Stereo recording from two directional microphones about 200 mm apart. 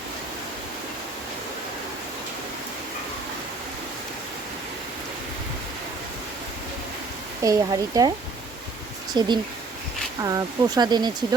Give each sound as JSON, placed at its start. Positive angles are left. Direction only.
{"t": 7.4, "sound": "speech", "side_deg": -20}
{"t": 9.1, "sound": "speech", "side_deg": -20}